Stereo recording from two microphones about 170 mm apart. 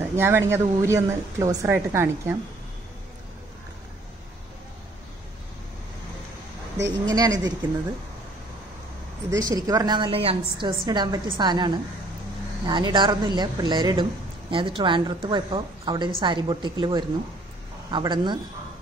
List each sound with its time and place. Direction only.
0.0 s a woman's voice: 15° right (ahead or behind)
6.8 s a woman's voice: 20° right (ahead or behind)
9.3 s a woman's voice: 20° right (ahead or behind)